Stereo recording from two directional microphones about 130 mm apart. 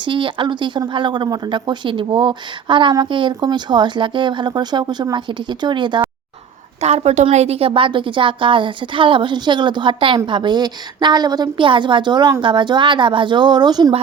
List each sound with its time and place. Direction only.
0.0 s speech: 40° right (ahead or behind)
6.8 s a woman's voice: 55° right (ahead or behind); by 13.9 s 30° right (ahead or behind)